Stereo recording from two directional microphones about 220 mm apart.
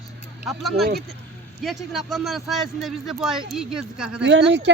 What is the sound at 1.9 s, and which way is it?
Speech, centre (ahead or behind).